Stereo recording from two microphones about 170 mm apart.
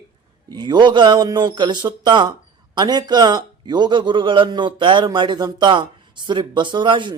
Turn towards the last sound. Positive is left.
turn(degrees=-30)  # may be behind; listen again after turning